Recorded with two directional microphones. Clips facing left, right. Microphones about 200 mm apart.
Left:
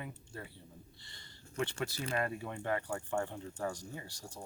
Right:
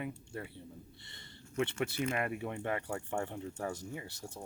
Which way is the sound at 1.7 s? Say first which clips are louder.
Right 4 dB; 35° left (ahead or behind).